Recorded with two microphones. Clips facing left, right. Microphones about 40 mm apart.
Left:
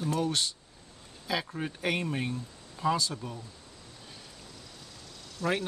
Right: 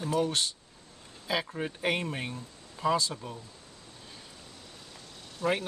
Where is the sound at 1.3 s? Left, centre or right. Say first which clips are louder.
Right 1 dB; centre.